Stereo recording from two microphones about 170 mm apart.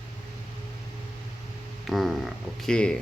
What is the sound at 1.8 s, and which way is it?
Speech, centre (ahead or behind).